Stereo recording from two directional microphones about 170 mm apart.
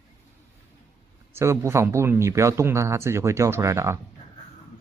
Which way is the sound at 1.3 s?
15° right (ahead or behind).